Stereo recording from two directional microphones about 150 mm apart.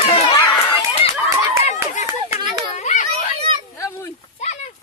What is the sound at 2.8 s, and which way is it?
Children playing, 55° left (ahead or behind).